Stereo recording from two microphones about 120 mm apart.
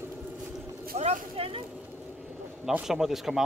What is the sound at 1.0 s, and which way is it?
Vehicle, 55° right (ahead or behind).